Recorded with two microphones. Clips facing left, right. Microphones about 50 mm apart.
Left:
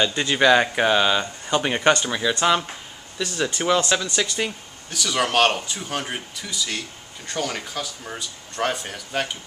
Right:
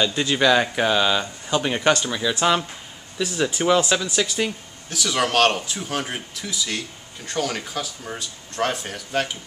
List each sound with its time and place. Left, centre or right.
0.0 s speech: centre
3.2 s speech: centre